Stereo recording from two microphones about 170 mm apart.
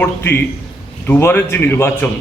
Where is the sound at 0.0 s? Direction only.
15° left (ahead or behind).